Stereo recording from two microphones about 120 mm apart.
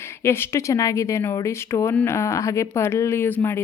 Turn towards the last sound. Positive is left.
turn(degrees=15)  # may be behind; listen again after turning